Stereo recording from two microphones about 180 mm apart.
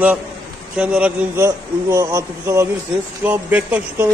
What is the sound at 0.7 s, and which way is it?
Speech, 5° right (ahead or behind).